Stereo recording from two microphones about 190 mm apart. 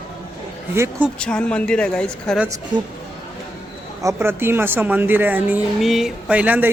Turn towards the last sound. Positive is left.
turn(degrees=-10)  # may be behind; listen again after turning